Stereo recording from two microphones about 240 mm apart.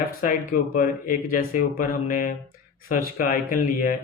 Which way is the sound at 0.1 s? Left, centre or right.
Left.